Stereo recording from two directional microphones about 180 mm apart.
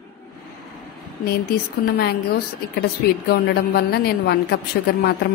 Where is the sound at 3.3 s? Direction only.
60° left (ahead or behind).